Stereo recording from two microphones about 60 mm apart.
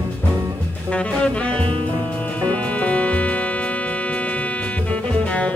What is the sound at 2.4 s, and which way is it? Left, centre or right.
Music, left.